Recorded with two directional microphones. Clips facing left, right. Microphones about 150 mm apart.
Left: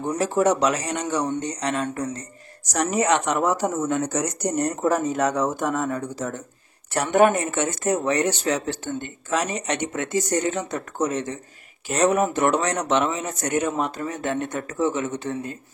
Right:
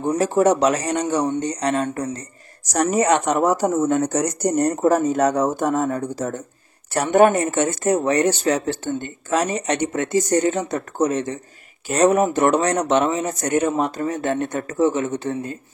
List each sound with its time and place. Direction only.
0.2 s speech: 40° right (ahead or behind)